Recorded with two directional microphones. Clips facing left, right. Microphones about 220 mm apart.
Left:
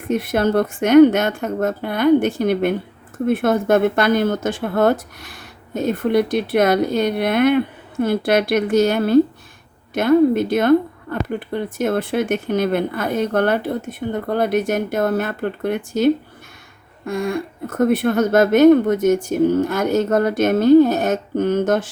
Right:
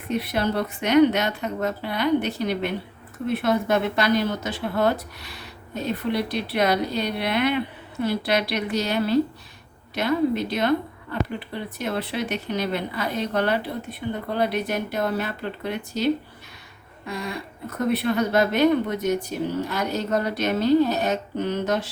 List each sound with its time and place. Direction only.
0.1 s speech: 50° left (ahead or behind)